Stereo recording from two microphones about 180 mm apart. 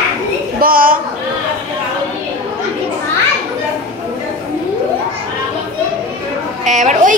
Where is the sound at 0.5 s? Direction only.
50° right (ahead or behind).